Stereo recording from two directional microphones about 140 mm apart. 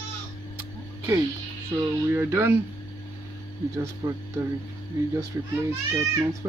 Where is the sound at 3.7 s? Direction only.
20° right (ahead or behind).